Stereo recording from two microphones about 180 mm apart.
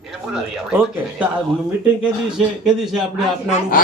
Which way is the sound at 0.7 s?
5° right (ahead or behind).